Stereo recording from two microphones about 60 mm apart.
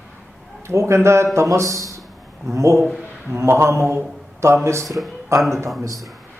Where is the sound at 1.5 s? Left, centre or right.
Right.